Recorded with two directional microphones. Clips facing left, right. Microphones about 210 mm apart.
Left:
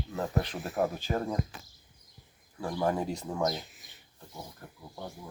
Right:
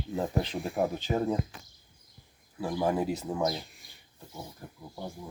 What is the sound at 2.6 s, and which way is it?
Speech, 10° right (ahead or behind).